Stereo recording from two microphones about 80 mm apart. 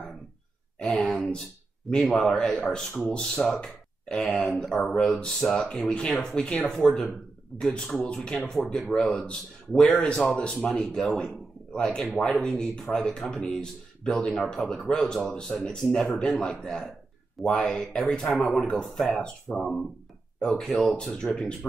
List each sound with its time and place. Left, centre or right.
0.9 s speech: centre